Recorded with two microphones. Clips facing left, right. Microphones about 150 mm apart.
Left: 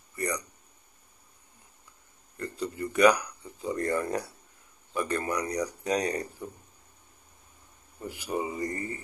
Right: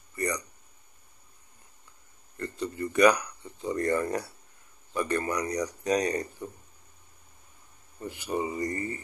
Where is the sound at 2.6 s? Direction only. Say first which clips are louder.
Even; 15° left (ahead or behind).